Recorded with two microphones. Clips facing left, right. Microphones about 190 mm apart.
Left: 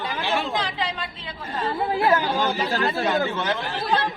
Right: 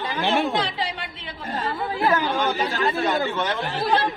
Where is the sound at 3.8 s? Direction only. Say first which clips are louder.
Right 3 dB; 30° right (ahead or behind).